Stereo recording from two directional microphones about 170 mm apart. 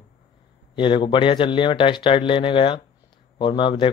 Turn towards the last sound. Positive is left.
turn(degrees=30)  # may be behind; listen again after turning